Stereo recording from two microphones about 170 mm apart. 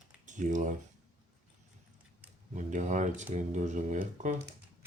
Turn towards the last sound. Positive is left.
turn(degrees=-50)  # may be behind; listen again after turning